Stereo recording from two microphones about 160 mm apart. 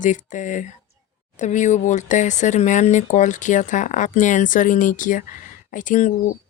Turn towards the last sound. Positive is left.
turn(degrees=55)  # may be behind; listen again after turning